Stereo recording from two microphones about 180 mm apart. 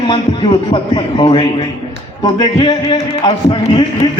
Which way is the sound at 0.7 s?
25° left (ahead or behind).